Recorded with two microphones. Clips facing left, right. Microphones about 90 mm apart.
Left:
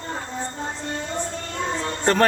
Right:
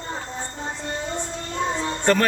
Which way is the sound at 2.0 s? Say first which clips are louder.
Left 1 dB; 30° left (ahead or behind).